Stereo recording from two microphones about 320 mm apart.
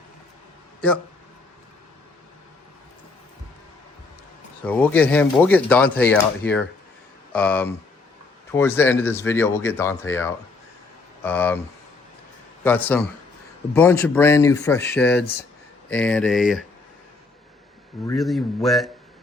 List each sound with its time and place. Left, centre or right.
4.6 s speech: centre
7.3 s speech: centre
12.6 s speech: centre
15.2 s speech: left
15.9 s speech: centre
18.0 s speech: centre